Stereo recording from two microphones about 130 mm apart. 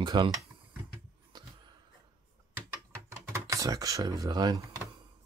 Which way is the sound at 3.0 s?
20° right (ahead or behind).